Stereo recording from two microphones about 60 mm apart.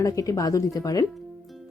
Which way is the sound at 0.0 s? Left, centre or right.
Left.